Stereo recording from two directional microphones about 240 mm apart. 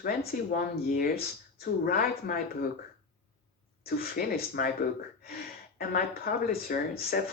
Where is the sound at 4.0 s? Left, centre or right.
Left.